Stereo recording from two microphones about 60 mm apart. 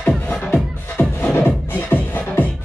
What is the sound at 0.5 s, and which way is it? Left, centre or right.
Music, left.